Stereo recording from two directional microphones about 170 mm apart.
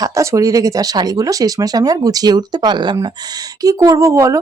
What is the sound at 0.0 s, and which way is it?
Speech, 20° right (ahead or behind).